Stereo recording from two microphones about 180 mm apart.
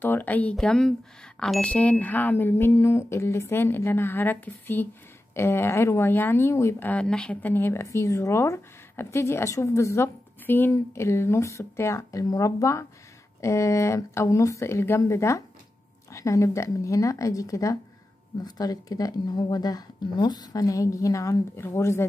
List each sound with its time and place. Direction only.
0.0 s speech: 10° left (ahead or behind)